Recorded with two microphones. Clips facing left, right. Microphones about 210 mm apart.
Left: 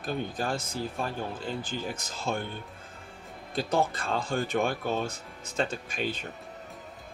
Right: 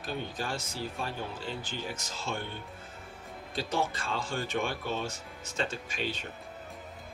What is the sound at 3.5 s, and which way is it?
Speech, 55° left (ahead or behind).